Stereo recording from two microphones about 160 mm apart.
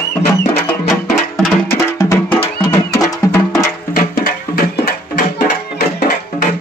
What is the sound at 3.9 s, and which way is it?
Music, 65° left (ahead or behind).